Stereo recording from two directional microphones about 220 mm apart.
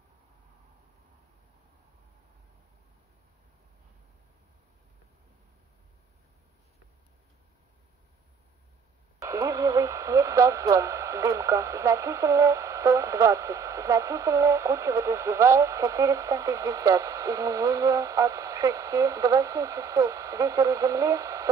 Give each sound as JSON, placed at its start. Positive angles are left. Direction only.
{"t": 9.2, "sound": "speech", "side_deg": -15}